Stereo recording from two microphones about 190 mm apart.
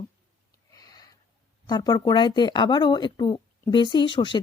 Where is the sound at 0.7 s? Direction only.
20° left (ahead or behind).